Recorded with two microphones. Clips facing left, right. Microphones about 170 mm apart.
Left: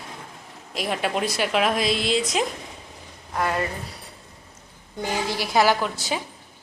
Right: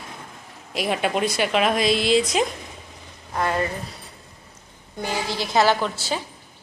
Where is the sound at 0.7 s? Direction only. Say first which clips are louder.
Right 2 dB; centre (ahead or behind).